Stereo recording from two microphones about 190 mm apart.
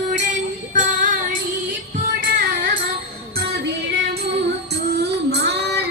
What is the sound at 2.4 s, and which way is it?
Music, 50° right (ahead or behind).